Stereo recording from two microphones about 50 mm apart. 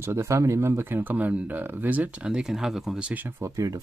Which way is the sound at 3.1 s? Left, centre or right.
Right.